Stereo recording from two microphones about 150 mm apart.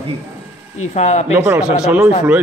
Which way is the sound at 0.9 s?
50° left (ahead or behind).